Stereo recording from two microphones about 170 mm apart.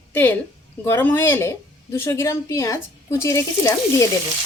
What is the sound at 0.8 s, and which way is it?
A woman's voice, 10° left (ahead or behind).